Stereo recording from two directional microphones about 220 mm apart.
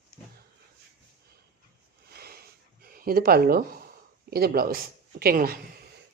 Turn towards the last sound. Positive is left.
turn(degrees=-40)  # may be behind; listen again after turning